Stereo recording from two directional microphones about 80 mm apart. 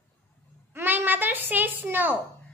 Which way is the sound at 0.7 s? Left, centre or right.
Right.